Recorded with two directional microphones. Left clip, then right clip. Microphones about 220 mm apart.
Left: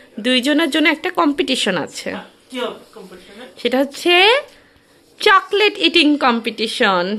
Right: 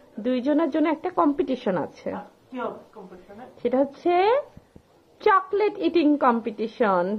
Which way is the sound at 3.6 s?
15° left (ahead or behind).